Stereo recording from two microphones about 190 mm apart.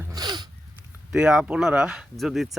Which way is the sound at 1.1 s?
5° right (ahead or behind).